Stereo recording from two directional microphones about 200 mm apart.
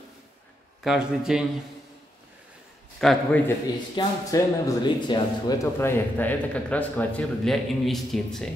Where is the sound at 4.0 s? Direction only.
20° left (ahead or behind).